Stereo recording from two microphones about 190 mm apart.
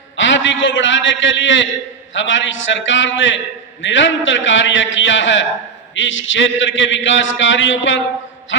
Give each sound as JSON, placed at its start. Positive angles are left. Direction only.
{"t": 0.2, "sound": "a man's voice", "side_deg": 75}